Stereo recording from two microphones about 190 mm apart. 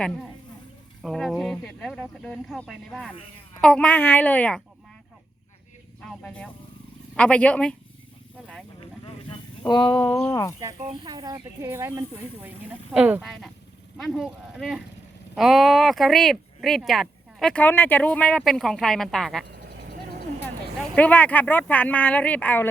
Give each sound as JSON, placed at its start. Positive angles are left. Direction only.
{"t": 1.0, "sound": "speech", "side_deg": 0}
{"t": 6.0, "sound": "speech", "side_deg": 5}
{"t": 9.6, "sound": "a sound", "side_deg": 25}
{"t": 10.2, "sound": "speech", "side_deg": 15}
{"t": 11.0, "sound": "speech", "side_deg": -20}
{"t": 19.5, "sound": "a sound", "side_deg": -55}
{"t": 20.9, "sound": "speech", "side_deg": 10}